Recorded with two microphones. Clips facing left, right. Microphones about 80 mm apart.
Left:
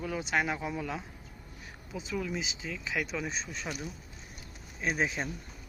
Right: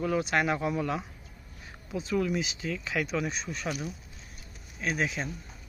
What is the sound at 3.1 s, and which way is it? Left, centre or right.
Speech, centre.